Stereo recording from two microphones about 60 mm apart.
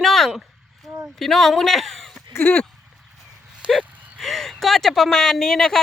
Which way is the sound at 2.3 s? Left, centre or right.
Left.